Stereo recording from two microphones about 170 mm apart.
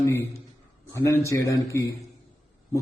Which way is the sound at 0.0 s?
15° left (ahead or behind).